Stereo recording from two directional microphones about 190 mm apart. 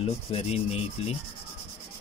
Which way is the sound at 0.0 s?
30° left (ahead or behind).